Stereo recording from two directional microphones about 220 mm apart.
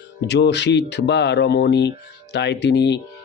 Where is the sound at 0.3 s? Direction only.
50° left (ahead or behind).